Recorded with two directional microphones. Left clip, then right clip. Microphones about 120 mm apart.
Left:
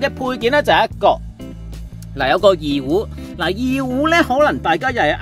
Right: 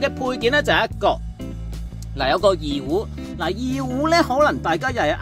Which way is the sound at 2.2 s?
20° left (ahead or behind).